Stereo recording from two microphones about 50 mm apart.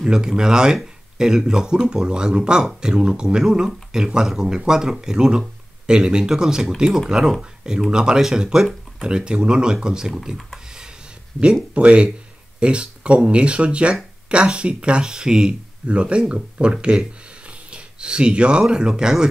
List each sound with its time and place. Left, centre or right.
0.0 s speech: centre
11.7 s speech: right